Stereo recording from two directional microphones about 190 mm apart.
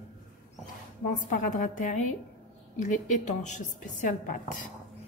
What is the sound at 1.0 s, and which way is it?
A woman's voice, 45° left (ahead or behind).